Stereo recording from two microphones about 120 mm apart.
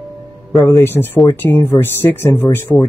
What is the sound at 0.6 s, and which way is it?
Speech, 20° left (ahead or behind).